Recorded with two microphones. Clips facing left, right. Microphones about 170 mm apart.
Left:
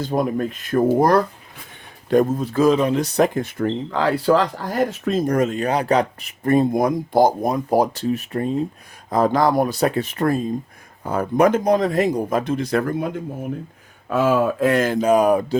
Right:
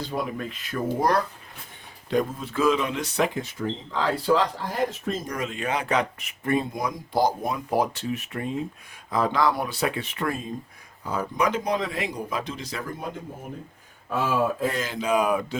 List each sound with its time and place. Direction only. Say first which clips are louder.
0.0 s speech: left 8 dB; 45° left (ahead or behind); by 5.3 s 70° left (ahead or behind)
5.3 s speech: left 9 dB; 45° left (ahead or behind)
11.0 s speech: left 8 dB; 55° left (ahead or behind)
14.1 s speech: left 6 dB; 75° left (ahead or behind); by 15.5 s 40° left (ahead or behind)